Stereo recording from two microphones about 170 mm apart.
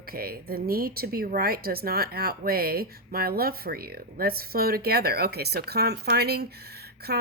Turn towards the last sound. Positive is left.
turn(degrees=-70)  # may be behind; listen again after turning